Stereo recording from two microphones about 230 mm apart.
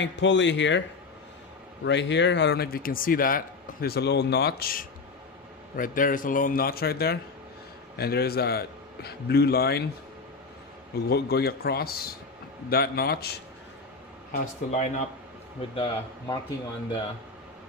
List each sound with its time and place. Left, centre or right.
0.0 s speech: left
1.9 s a man's voice: left
11.1 s a man's voice: left
15.7 s a man's voice: centre